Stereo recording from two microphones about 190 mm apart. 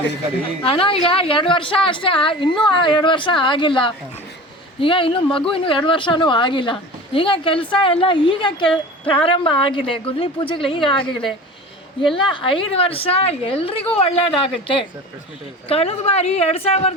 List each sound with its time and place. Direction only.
0.6 s a woman's voice: 30° left (ahead or behind)